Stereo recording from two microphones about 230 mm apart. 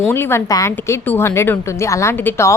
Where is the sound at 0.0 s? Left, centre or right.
Centre.